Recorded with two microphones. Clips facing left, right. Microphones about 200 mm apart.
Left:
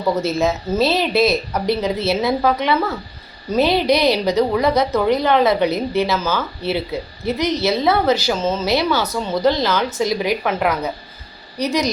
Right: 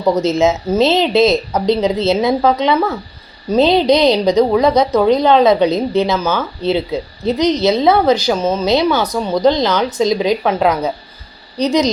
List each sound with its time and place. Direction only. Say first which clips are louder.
0.2 s a woman's voice: right 5 dB; 20° right (ahead or behind)